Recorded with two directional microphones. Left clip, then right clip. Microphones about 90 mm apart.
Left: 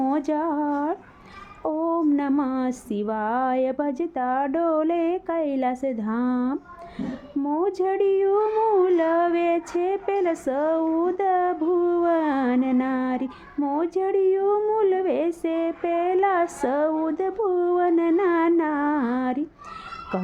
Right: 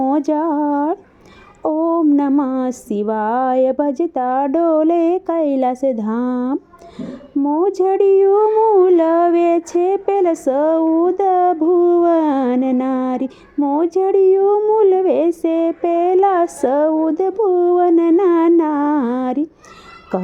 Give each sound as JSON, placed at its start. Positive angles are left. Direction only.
{"t": 0.0, "sound": "speech", "side_deg": -25}
{"t": 1.6, "sound": "female singing", "side_deg": -25}
{"t": 5.8, "sound": "speech", "side_deg": -30}
{"t": 16.6, "sound": "female singing", "side_deg": -20}
{"t": 17.1, "sound": "speech", "side_deg": -25}